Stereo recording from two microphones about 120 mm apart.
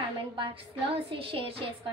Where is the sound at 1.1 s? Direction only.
45° right (ahead or behind).